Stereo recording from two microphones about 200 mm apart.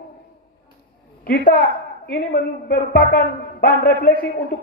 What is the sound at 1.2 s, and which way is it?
A man's voice, 45° left (ahead or behind).